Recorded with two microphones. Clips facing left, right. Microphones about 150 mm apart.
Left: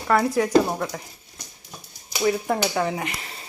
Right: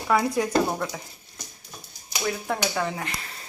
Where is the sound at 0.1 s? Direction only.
Centre (ahead or behind).